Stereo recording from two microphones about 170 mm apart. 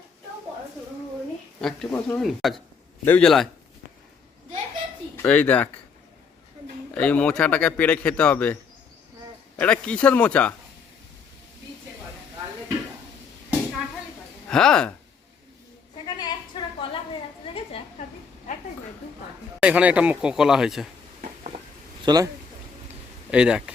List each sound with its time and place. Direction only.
1.6 s a man's voice: 5° left (ahead or behind)
5.1 s speech: 10° left (ahead or behind)
6.9 s speech: 10° left (ahead or behind)
9.6 s speech: 5° left (ahead or behind)
14.5 s a man's voice: 5° left (ahead or behind)
16.0 s a sound: 25° left (ahead or behind)
19.5 s a man's voice: 10° right (ahead or behind)
22.0 s a man's voice: 25° right (ahead or behind)
23.3 s a man's voice: 5° right (ahead or behind)